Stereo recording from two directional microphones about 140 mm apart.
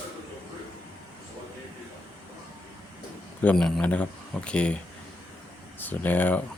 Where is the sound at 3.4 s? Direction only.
10° left (ahead or behind).